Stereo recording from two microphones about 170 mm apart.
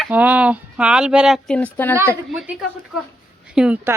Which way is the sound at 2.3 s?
Centre (ahead or behind).